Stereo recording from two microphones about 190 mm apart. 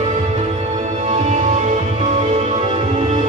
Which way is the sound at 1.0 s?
35° right (ahead or behind).